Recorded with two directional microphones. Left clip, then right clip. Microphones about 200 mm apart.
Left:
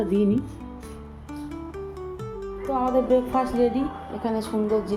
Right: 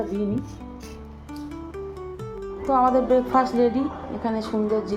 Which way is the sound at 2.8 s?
Centre (ahead or behind).